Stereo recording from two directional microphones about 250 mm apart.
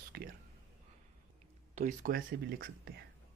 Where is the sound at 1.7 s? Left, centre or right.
Right.